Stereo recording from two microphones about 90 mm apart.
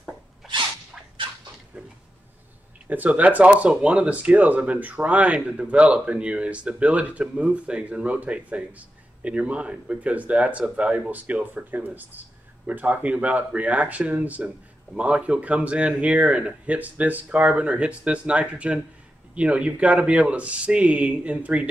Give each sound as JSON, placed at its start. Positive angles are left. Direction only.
{"t": 0.4, "sound": "sneeze", "side_deg": -5}
{"t": 2.9, "sound": "speech", "side_deg": -15}